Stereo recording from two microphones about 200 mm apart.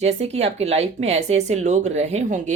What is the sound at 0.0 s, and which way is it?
A woman's voice, 35° right (ahead or behind).